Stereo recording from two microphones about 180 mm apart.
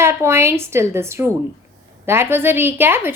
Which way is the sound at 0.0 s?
15° right (ahead or behind).